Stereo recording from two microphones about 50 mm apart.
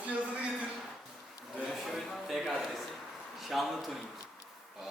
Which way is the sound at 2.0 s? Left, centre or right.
Centre.